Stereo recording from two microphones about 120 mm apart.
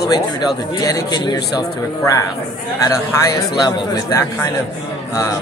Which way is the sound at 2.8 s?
25° left (ahead or behind).